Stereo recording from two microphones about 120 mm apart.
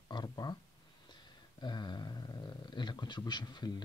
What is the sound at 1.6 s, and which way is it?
Speech, 40° left (ahead or behind).